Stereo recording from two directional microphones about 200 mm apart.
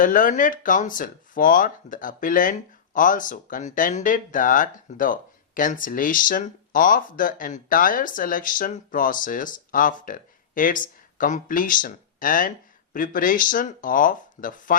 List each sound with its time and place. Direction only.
0.0 s speech: 40° left (ahead or behind)